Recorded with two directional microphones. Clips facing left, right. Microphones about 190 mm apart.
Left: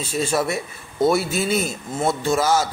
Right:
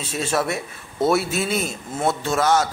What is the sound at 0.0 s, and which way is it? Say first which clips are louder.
A man's voice: left 2 dB; centre (ahead or behind).